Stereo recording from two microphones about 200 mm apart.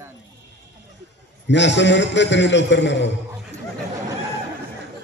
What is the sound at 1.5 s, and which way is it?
A man's voice, 60° left (ahead or behind).